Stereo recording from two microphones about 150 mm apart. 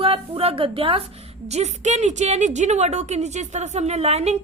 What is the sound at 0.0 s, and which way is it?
A woman's voice, 40° right (ahead or behind).